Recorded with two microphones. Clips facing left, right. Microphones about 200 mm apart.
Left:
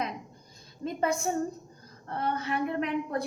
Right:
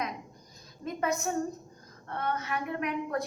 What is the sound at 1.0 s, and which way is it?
A woman's voice, 30° left (ahead or behind).